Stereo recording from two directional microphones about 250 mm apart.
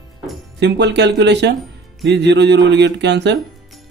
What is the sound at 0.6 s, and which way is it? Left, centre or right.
Speech, right.